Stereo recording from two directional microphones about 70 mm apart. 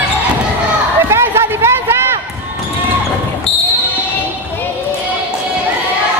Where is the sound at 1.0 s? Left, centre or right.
Right.